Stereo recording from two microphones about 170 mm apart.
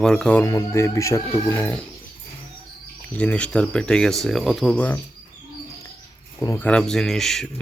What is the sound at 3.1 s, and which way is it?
Speech, 10° left (ahead or behind).